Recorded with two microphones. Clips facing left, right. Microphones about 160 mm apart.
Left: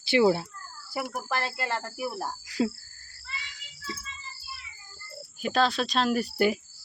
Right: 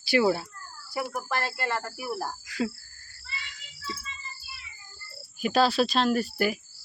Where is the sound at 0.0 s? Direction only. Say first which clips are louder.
Left 2 dB; 20° left (ahead or behind).